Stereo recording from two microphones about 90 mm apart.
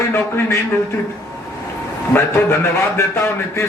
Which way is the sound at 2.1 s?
30° left (ahead or behind).